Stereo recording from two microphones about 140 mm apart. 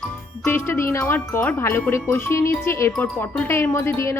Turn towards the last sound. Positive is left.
turn(degrees=20)  # may be behind; listen again after turning